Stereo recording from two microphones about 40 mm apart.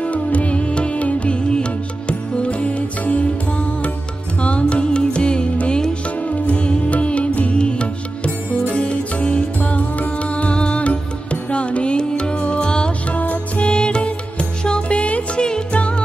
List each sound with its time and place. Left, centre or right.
0.0 s music: left
9.6 s music: left
13.1 s music: left
13.7 s music: left